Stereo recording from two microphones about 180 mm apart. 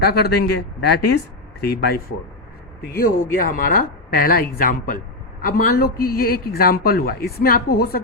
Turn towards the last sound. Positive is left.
turn(degrees=55)  # may be behind; listen again after turning